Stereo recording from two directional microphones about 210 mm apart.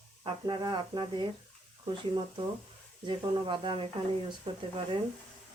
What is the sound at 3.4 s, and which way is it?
Speech, 25° right (ahead or behind).